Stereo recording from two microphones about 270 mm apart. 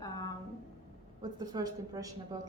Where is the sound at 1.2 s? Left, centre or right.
Centre.